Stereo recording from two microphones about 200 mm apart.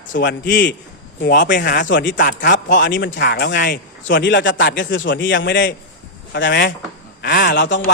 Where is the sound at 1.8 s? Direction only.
60° left (ahead or behind).